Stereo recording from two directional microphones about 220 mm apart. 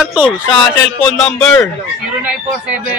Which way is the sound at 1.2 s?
5° left (ahead or behind).